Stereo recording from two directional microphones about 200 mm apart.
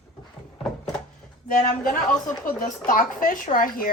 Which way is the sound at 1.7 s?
40° left (ahead or behind).